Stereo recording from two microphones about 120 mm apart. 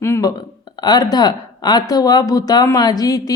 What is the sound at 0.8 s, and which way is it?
Speech, 35° left (ahead or behind).